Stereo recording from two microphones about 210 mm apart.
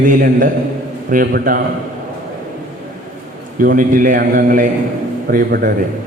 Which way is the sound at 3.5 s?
40° right (ahead or behind).